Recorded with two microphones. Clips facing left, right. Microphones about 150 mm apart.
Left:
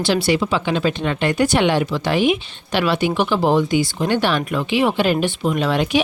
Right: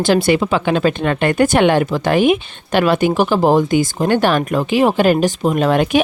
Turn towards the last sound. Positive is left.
turn(degrees=-50)  # may be behind; listen again after turning